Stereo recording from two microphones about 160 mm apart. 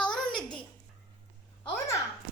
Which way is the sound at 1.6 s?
20° left (ahead or behind).